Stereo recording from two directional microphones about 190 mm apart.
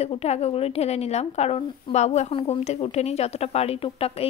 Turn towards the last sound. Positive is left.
turn(degrees=30)  # may be behind; listen again after turning